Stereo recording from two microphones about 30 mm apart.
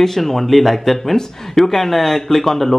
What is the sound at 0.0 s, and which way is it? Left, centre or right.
Speech, centre.